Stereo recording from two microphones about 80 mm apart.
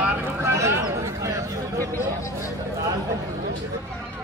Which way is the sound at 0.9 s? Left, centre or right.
Right.